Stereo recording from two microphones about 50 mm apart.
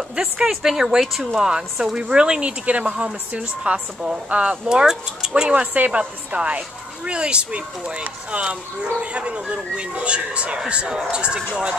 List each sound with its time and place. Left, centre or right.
0.1 s speech: centre
0.5 s speech: centre; by 4.6 s right
4.6 s speech: centre